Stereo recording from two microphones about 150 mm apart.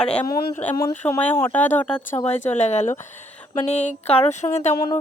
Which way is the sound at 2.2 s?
50° left (ahead or behind).